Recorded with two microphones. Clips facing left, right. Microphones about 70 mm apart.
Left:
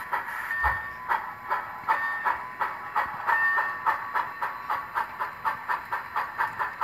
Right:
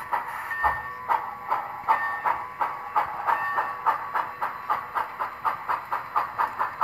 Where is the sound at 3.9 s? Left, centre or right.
Centre.